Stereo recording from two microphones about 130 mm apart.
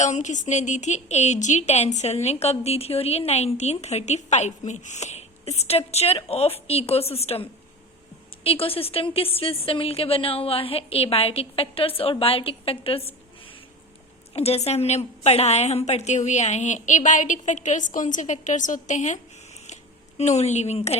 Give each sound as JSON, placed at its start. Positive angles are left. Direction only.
{"t": 0.0, "sound": "a woman's voice", "side_deg": 65}
{"t": 8.4, "sound": "a woman's voice", "side_deg": 45}
{"t": 19.6, "sound": "a sound", "side_deg": 65}